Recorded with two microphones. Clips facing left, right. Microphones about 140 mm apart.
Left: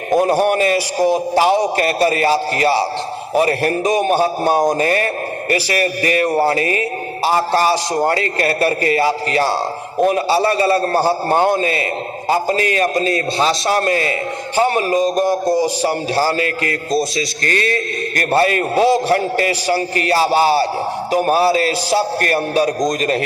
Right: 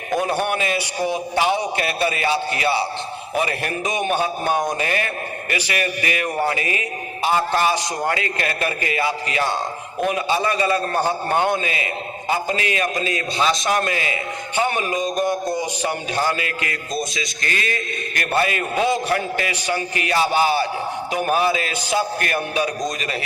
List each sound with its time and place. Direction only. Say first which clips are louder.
0.1 s a man's voice: left 7 dB; 40° left (ahead or behind)